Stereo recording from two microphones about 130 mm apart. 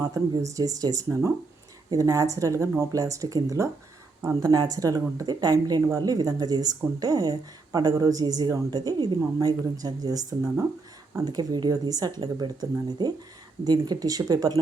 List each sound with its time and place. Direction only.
0.0 s speech: 25° right (ahead or behind)